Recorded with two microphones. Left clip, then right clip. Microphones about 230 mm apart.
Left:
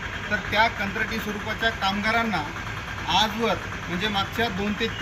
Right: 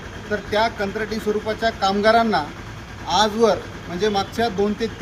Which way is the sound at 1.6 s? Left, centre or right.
Right.